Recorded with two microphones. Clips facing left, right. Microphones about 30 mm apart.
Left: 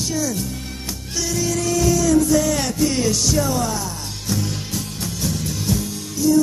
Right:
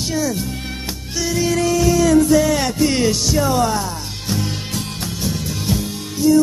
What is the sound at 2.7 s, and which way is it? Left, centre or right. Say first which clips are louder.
Music: right 3 dB; right.